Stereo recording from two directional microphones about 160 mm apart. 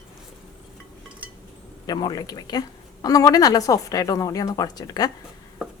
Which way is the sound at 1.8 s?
25° left (ahead or behind).